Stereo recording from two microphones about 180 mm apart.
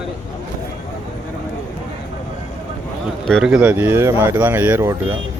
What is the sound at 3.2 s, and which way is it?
Speech, centre (ahead or behind).